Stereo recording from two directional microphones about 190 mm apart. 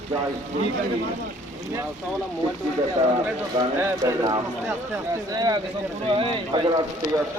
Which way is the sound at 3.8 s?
15° right (ahead or behind).